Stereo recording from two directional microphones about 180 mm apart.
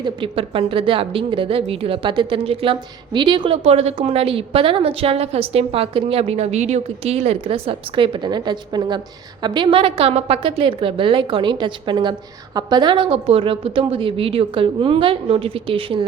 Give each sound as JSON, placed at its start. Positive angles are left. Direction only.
{"t": 0.0, "sound": "a woman's voice", "side_deg": -30}